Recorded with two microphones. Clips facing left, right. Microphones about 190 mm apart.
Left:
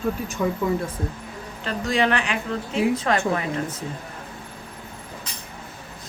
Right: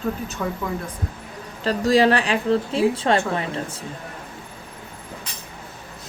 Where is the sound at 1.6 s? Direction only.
35° right (ahead or behind).